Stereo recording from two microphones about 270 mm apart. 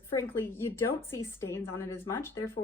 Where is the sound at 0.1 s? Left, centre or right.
Centre.